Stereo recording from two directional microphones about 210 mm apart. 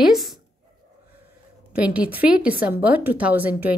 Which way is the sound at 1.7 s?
5° right (ahead or behind).